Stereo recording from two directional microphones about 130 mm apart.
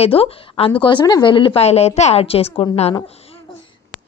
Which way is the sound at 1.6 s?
55° left (ahead or behind).